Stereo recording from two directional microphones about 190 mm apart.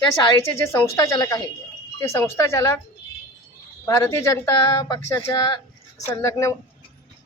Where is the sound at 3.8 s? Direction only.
15° left (ahead or behind).